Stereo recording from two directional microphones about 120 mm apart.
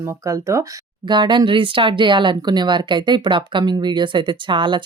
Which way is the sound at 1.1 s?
40° right (ahead or behind).